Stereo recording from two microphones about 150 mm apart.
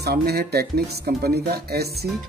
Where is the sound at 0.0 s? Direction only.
90° right.